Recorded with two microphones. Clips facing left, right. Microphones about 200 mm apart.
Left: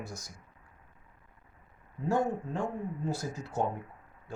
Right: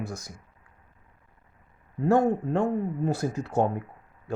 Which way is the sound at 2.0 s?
60° right (ahead or behind).